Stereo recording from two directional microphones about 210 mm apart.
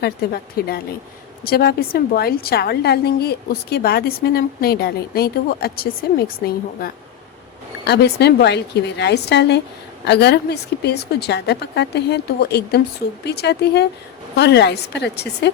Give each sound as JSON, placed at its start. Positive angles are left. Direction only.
{"t": 0.0, "sound": "a woman's voice", "side_deg": 45}